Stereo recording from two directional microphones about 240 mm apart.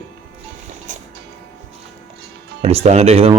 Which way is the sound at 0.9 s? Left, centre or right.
Right.